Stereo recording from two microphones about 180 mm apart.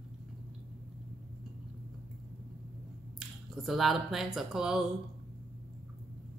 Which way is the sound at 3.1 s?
Centre (ahead or behind).